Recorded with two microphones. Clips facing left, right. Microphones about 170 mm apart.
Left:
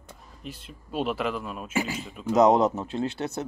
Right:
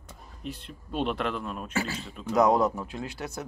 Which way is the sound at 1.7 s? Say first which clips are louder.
Left 5 dB; 15° left (ahead or behind).